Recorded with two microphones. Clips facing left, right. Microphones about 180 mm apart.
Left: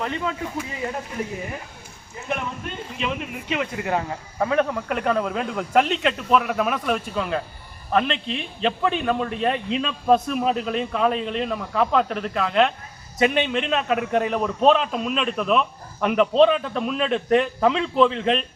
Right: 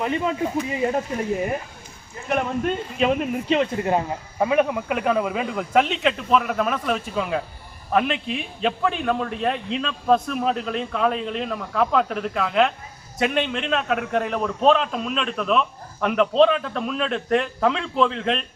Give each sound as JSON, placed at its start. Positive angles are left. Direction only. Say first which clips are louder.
{"t": 0.0, "sound": "speech", "louder": "right 4 dB", "side_deg": -20}
{"t": 3.0, "sound": "a man's voice", "louder": "right 7 dB", "side_deg": -45}